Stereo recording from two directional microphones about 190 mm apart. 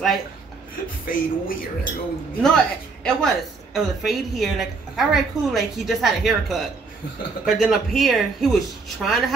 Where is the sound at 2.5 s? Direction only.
5° left (ahead or behind).